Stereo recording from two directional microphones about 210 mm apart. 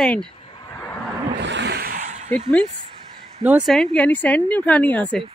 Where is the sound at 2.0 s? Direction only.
35° right (ahead or behind).